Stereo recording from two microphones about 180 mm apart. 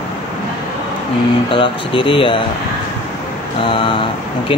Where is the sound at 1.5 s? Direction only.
30° left (ahead or behind).